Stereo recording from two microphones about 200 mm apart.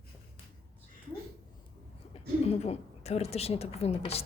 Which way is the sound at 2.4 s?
30° left (ahead or behind).